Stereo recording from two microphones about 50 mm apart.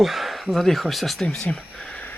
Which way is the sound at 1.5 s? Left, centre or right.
Left.